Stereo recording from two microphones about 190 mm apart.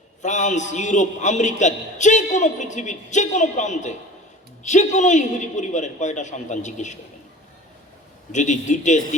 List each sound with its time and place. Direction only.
0.2 s a man's voice: 40° left (ahead or behind)
8.3 s a man's voice: 40° left (ahead or behind)